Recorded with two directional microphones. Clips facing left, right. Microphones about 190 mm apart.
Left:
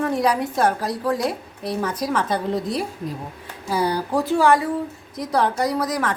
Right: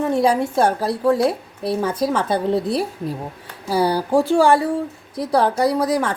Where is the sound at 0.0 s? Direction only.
25° right (ahead or behind).